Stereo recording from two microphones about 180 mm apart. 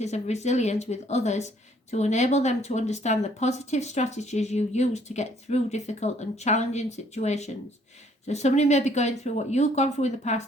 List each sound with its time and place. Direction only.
0.0 s speech: 40° left (ahead or behind)